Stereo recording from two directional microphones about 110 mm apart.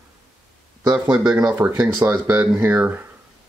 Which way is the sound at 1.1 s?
10° right (ahead or behind).